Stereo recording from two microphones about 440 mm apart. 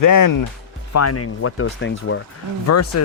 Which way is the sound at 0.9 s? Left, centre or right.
Left.